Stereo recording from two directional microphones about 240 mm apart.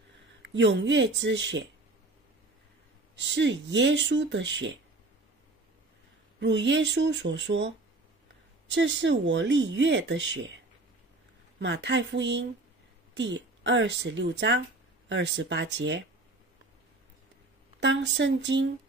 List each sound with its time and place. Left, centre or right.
0.4 s speech: right
3.2 s speech: right
6.4 s speech: right
11.6 s speech: right
17.7 s speech: right